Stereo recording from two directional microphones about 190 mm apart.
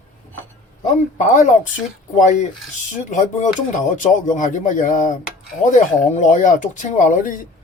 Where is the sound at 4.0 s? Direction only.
40° left (ahead or behind).